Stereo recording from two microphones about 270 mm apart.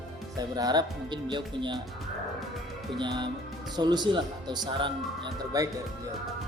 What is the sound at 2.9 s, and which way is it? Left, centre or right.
Speech, centre.